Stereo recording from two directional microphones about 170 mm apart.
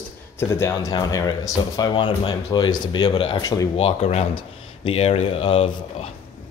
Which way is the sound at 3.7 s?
35° left (ahead or behind).